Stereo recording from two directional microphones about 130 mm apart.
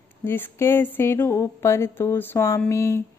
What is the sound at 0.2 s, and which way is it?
Speech, 15° left (ahead or behind).